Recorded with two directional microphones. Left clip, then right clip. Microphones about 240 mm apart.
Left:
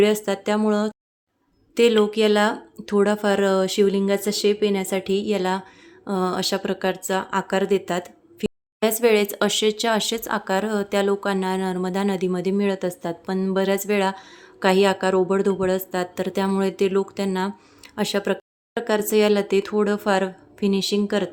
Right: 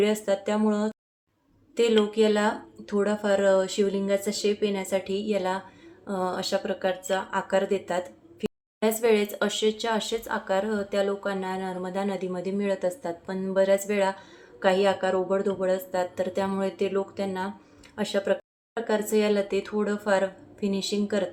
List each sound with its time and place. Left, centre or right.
0.0 s speech: left